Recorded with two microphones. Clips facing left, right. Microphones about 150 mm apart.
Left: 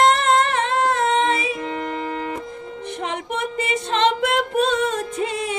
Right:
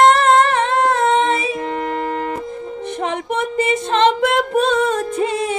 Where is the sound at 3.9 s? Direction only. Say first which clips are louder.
Right 3 dB; 45° right (ahead or behind).